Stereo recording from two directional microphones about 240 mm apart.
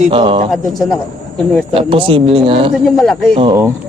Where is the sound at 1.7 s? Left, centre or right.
Right.